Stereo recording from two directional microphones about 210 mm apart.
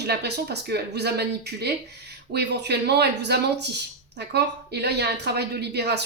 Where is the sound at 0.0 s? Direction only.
50° right (ahead or behind).